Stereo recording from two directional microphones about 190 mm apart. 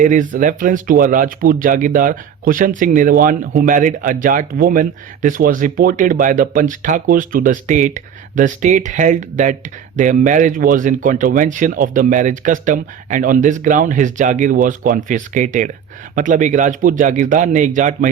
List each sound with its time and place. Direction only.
0.0 s speech: 45° right (ahead or behind)